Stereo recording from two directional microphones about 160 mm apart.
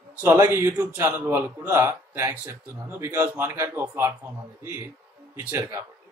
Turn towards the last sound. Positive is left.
turn(degrees=-15)  # may be behind; listen again after turning